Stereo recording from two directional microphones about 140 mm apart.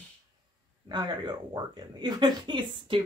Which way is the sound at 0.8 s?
30° right (ahead or behind).